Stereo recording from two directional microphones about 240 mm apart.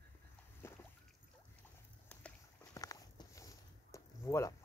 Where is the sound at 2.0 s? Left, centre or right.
Centre.